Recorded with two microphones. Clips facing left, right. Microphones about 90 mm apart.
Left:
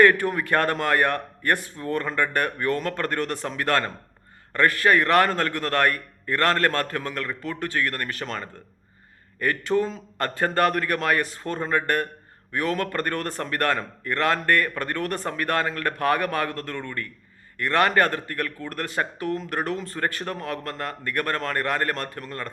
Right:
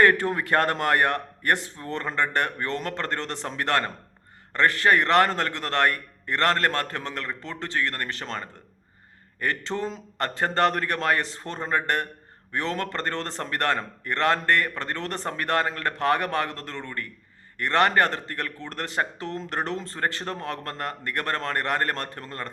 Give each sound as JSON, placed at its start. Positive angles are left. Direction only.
{"t": 0.0, "sound": "a man's voice", "side_deg": -25}